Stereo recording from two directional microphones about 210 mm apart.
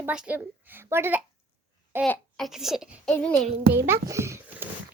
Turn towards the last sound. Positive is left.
turn(degrees=-15)  # may be behind; listen again after turning